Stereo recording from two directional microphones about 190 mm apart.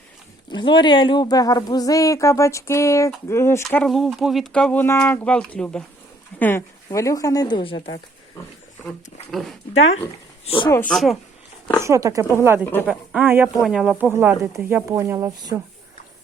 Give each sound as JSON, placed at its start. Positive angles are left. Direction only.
{"t": 0.5, "sound": "speech", "side_deg": 25}
{"t": 9.3, "sound": "speech", "side_deg": 0}
{"t": 10.4, "sound": "speech", "side_deg": 30}
{"t": 10.7, "sound": "speech", "side_deg": 10}
{"t": 11.8, "sound": "speech", "side_deg": -15}
{"t": 14.1, "sound": "speech", "side_deg": -10}